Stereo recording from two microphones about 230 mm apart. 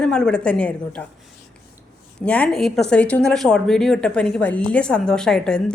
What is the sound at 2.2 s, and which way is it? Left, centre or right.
A woman's voice, centre.